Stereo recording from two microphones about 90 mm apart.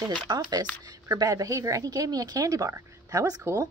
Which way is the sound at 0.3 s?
45° right (ahead or behind).